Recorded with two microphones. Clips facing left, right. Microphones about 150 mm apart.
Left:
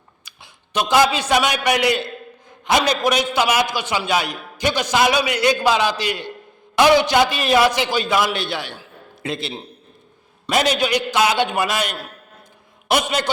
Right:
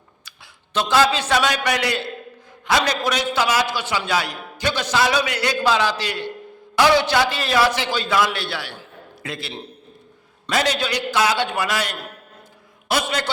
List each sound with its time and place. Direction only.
0.3 s a man's voice: 15° left (ahead or behind)
10.5 s a man's voice: 20° left (ahead or behind)